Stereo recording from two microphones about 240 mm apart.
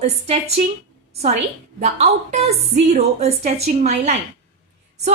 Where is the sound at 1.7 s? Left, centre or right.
Right.